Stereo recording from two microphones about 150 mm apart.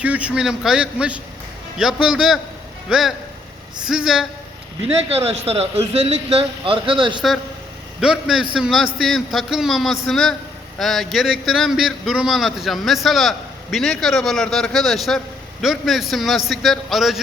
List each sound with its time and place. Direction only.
0.0 s a man's voice: 10° right (ahead or behind)
5.1 s speech: 40° right (ahead or behind)
8.0 s speech: centre (ahead or behind)